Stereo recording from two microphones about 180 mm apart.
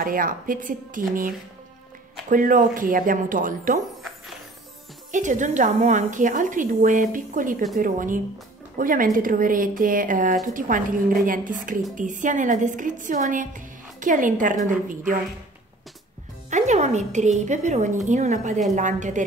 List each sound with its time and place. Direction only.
0.0 s speech: 50° right (ahead or behind)
2.2 s speech: 50° right (ahead or behind)
5.1 s speech: 45° right (ahead or behind)
16.4 s a woman's voice: 40° right (ahead or behind)